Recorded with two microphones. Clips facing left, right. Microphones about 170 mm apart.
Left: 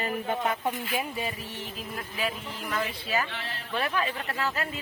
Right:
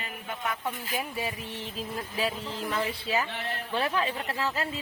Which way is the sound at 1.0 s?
5° right (ahead or behind).